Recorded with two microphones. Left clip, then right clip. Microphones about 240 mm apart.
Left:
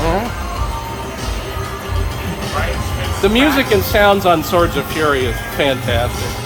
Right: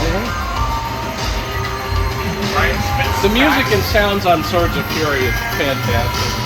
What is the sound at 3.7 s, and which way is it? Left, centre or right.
Speech, left.